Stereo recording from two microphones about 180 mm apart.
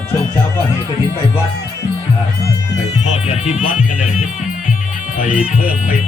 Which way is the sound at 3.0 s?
40° left (ahead or behind).